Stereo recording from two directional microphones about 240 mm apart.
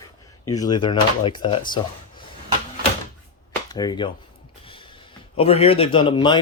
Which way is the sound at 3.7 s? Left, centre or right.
Centre.